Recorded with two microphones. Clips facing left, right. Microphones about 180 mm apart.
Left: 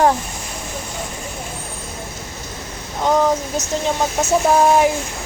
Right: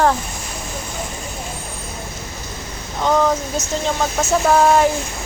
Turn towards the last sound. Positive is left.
turn(degrees=15)  # may be behind; listen again after turning